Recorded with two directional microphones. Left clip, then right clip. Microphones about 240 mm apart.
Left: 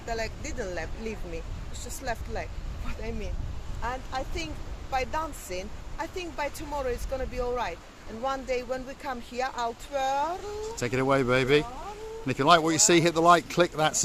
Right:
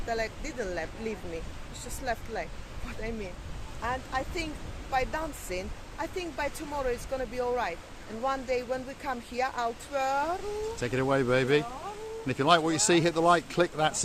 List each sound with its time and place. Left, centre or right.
0.1 s speech: centre
3.8 s speech: centre
10.8 s a man's voice: left